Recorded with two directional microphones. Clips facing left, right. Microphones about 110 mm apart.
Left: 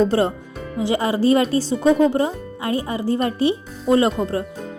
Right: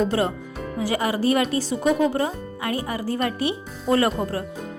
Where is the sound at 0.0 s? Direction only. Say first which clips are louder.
Left 4 dB; 30° left (ahead or behind).